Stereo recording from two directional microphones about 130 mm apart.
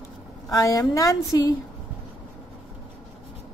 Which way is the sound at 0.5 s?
30° left (ahead or behind).